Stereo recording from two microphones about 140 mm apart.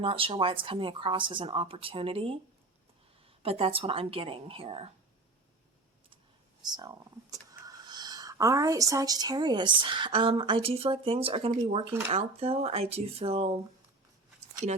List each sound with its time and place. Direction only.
0.0 s speech: 40° right (ahead or behind)
6.6 s speech: 30° right (ahead or behind); by 13.6 s 45° right (ahead or behind)